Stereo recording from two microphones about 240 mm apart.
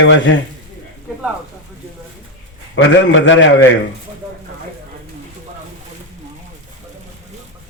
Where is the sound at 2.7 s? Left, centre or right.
Left.